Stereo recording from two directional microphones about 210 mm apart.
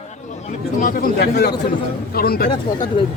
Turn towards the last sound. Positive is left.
turn(degrees=20)  # may be behind; listen again after turning